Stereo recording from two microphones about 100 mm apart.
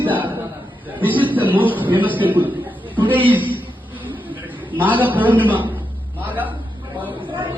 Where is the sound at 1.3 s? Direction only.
15° right (ahead or behind).